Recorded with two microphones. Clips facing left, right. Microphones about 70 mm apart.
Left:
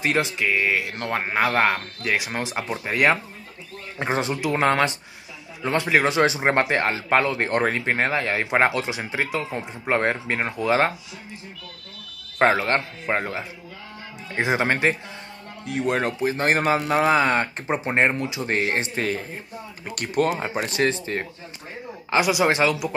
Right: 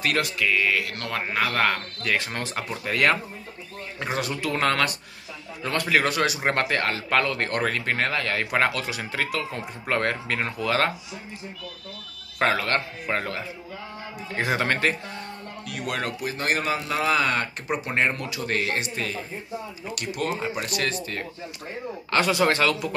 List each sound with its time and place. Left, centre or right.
0.0 s speech: left
12.4 s speech: left
20.5 s speech: left
22.1 s speech: centre